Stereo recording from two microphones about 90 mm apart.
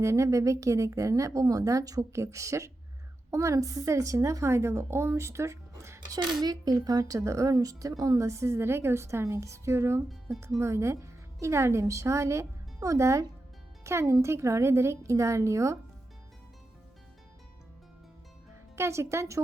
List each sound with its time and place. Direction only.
0.0 s a woman's voice: 35° right (ahead or behind)
6.1 s a woman's voice: 50° right (ahead or behind)
18.8 s a woman's voice: 30° right (ahead or behind)